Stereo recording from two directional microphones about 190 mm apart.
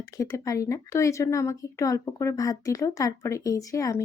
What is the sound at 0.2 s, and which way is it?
Speech, 15° left (ahead or behind).